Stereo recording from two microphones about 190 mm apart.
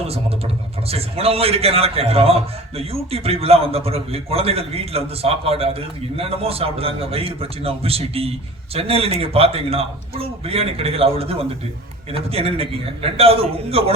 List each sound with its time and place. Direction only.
0.9 s a man's voice: 30° right (ahead or behind)